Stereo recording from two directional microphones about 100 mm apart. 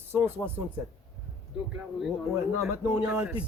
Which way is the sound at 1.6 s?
10° right (ahead or behind).